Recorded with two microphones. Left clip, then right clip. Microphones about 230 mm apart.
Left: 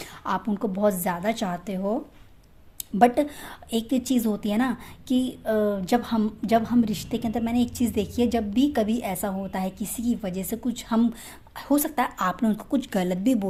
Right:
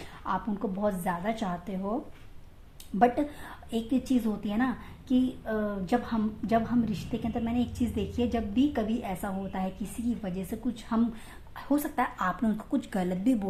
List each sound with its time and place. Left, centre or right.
0.3 s a woman's voice: left
3.7 s a woman's voice: left